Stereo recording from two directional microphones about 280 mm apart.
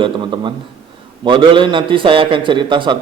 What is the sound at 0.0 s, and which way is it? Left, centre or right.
A man's voice, centre.